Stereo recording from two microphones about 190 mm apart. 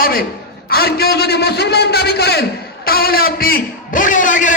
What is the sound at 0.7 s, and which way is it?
A man's voice, 55° left (ahead or behind).